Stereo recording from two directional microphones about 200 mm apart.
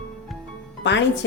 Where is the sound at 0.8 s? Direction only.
65° left (ahead or behind).